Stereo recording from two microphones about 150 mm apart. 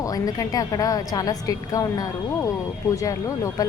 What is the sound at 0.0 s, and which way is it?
A woman's voice, 25° left (ahead or behind).